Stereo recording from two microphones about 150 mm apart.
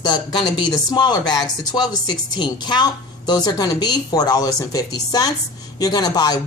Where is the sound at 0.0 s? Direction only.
30° left (ahead or behind).